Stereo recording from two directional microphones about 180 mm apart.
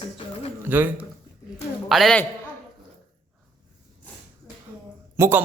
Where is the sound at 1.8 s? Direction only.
Centre (ahead or behind).